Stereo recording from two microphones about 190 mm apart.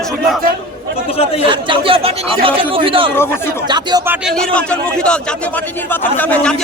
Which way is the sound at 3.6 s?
20° right (ahead or behind).